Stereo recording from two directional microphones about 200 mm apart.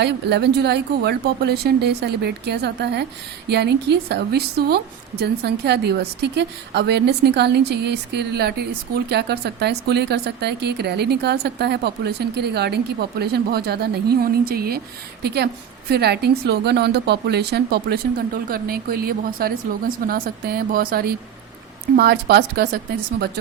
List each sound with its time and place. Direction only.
0.0 s a woman's voice: 60° right (ahead or behind)